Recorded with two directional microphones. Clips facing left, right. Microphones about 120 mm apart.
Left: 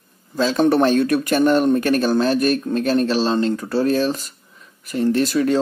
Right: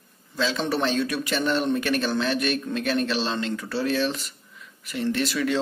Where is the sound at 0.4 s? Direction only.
45° left (ahead or behind).